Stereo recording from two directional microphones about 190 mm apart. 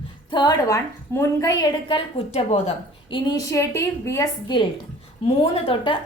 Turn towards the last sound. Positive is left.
turn(degrees=25)  # may be behind; listen again after turning